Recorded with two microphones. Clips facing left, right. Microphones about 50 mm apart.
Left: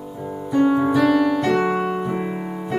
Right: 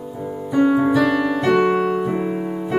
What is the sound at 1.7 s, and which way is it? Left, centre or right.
Keyboard, centre.